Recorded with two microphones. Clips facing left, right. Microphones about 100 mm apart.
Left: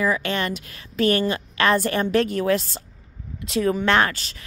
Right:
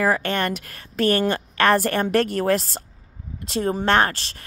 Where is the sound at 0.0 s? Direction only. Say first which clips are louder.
Right 2 dB; 55° right (ahead or behind).